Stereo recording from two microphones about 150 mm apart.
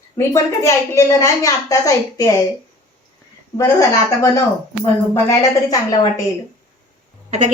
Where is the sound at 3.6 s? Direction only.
20° left (ahead or behind).